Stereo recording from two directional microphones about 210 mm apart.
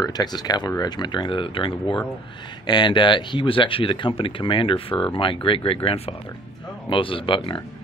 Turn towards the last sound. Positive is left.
turn(degrees=25)  # may be behind; listen again after turning